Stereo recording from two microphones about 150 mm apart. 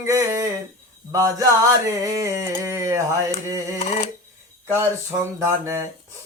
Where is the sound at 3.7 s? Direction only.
50° left (ahead or behind).